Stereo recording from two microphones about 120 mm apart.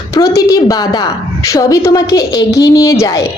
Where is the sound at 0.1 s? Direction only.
25° left (ahead or behind).